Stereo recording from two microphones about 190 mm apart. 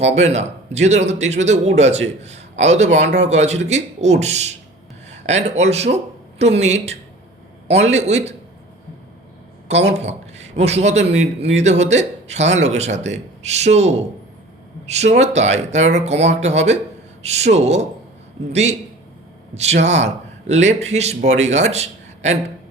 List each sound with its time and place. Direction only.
0.0 s a man's voice: 35° right (ahead or behind)
9.9 s a man's voice: 35° right (ahead or behind)
15.1 s a man's voice: 35° right (ahead or behind)